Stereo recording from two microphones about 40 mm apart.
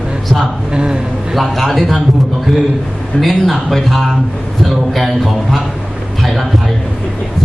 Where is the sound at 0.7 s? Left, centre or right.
Right.